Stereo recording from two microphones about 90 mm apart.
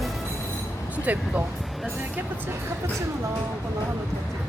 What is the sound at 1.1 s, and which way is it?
Speech, 20° right (ahead or behind).